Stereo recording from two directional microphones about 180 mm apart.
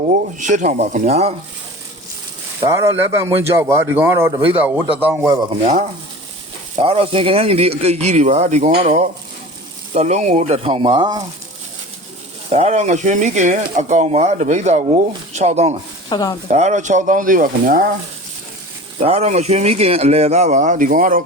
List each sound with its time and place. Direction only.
0.1 s speech: 45° right (ahead or behind)
2.6 s speech: 15° right (ahead or behind)
6.7 s speech: 35° right (ahead or behind)
9.9 s speech: 40° right (ahead or behind)
12.5 s speech: 40° right (ahead or behind)
16.0 s speech: 20° left (ahead or behind)
16.5 s speech: 40° right (ahead or behind)
18.9 s speech: 35° right (ahead or behind)